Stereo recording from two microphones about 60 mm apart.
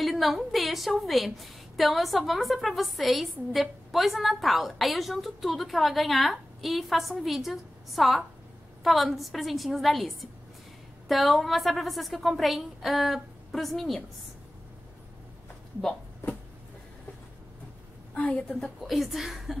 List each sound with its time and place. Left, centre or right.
0.0 s a woman's voice: centre
18.1 s a woman's voice: left
18.6 s a woman's voice: centre